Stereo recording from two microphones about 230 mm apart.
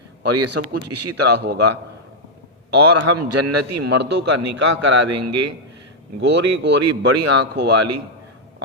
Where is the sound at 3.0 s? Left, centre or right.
Right.